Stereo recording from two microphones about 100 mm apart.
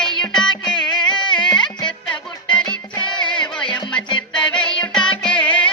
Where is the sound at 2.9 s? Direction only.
50° left (ahead or behind).